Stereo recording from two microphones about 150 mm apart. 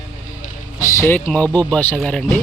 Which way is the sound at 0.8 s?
20° left (ahead or behind).